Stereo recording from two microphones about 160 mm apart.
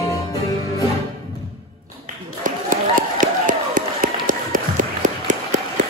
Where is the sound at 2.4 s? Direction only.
55° right (ahead or behind).